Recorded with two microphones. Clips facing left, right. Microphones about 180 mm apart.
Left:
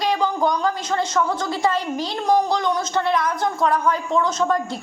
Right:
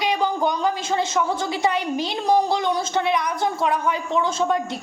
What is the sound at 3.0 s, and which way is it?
Speech, 10° right (ahead or behind).